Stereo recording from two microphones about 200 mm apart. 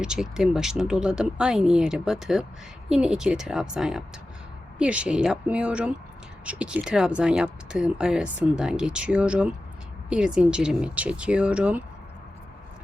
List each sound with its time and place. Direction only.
0.0 s speech: 5° right (ahead or behind)